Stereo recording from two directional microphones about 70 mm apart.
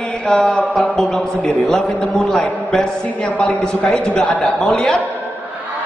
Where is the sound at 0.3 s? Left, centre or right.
Centre.